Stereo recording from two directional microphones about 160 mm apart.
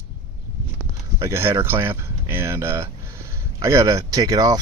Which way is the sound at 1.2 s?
15° right (ahead or behind).